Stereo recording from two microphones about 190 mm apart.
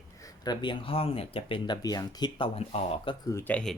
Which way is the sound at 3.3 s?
10° left (ahead or behind).